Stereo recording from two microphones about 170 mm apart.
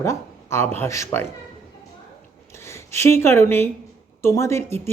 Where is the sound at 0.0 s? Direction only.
15° left (ahead or behind).